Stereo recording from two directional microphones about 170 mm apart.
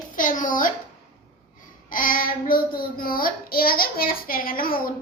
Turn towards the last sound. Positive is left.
turn(degrees=55)  # may be behind; listen again after turning